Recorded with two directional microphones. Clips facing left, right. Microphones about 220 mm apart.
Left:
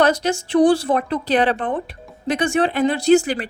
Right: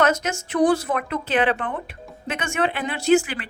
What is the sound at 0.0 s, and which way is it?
A woman's voice, 35° left (ahead or behind).